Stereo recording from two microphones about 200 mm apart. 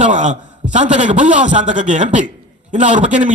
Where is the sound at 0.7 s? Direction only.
35° right (ahead or behind).